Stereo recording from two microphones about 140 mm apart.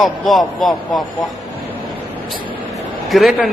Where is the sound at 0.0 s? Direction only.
Centre (ahead or behind).